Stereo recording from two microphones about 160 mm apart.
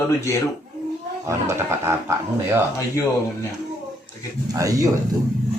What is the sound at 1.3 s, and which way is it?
Speech, 20° right (ahead or behind).